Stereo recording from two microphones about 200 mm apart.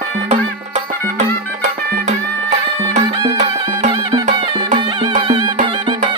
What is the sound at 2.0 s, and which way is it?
Music, 35° right (ahead or behind).